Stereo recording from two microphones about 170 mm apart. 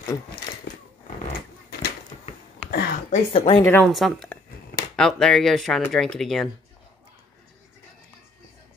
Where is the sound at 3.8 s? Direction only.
Centre (ahead or behind).